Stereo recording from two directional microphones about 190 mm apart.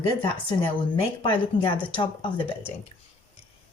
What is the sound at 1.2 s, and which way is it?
Speech, 25° left (ahead or behind).